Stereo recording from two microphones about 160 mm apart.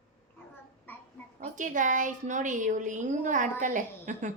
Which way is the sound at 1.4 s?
55° right (ahead or behind).